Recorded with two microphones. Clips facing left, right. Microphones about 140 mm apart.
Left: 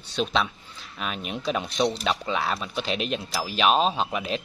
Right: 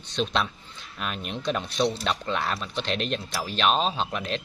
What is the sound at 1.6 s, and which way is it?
Speech, 15° left (ahead or behind).